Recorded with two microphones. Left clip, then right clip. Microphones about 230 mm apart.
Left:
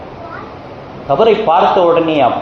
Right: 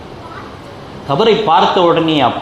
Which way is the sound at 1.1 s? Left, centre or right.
Right.